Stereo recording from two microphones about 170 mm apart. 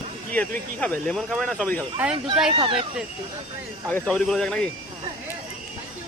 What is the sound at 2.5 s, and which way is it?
Speech, 30° right (ahead or behind).